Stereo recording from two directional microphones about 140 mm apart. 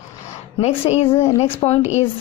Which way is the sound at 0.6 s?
50° left (ahead or behind).